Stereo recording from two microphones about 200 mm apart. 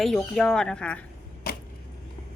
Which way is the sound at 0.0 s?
Centre (ahead or behind).